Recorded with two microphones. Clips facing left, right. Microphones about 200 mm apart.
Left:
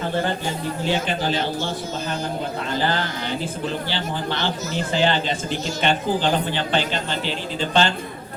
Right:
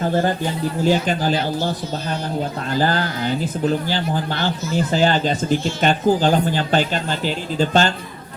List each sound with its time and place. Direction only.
0.9 s a man's voice: 45° right (ahead or behind)
2.8 s a man's voice: 45° right (ahead or behind)